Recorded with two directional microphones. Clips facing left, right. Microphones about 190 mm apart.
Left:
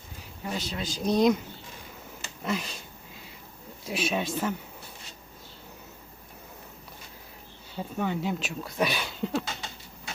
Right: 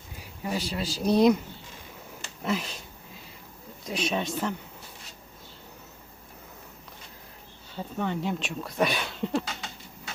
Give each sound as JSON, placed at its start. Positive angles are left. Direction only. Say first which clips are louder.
{"t": 0.2, "sound": "speech", "louder": "right 3 dB", "side_deg": -10}
{"t": 2.2, "sound": "sniff", "louder": "right 2 dB", "side_deg": 0}
{"t": 3.8, "sound": "speech", "louder": "even", "side_deg": 5}
{"t": 7.8, "sound": "speech", "louder": "even", "side_deg": 10}